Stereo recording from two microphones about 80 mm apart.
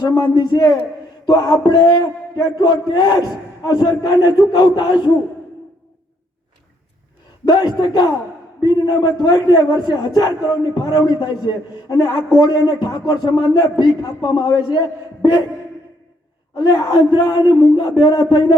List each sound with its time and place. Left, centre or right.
0.0 s a man's voice: left
1.2 s a sound: left
1.6 s a man's voice: left
7.4 s a man's voice: left
16.6 s a man's voice: left